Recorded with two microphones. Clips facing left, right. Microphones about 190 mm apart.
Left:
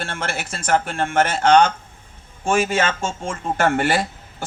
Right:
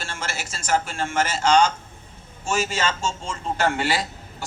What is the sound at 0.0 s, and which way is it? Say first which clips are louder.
A man's voice: left 5 dB; 60° left (ahead or behind).